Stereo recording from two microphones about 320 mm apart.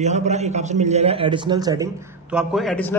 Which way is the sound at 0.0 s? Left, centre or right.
Right.